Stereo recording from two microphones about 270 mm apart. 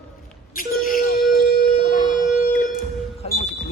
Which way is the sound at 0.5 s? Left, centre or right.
Left.